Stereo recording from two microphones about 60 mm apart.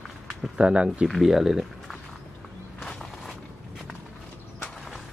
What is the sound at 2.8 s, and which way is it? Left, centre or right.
Walk, centre.